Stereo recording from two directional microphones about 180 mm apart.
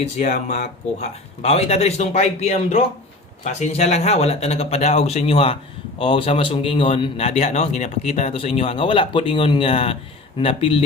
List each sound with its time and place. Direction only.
0.0 s a man's voice: 40° left (ahead or behind)